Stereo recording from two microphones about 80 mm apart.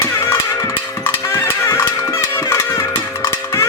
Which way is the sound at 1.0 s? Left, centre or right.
Left.